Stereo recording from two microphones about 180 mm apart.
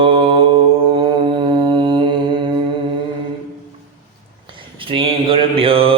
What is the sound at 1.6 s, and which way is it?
Mantra, 25° right (ahead or behind).